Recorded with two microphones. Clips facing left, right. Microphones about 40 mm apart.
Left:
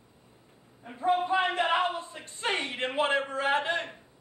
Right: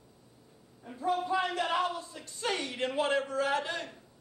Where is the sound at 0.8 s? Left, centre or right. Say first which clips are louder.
Left 4 dB; left.